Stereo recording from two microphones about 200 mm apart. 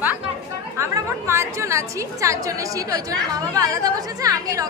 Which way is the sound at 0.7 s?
15° right (ahead or behind).